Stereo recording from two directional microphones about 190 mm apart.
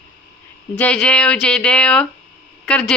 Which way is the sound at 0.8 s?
5° left (ahead or behind).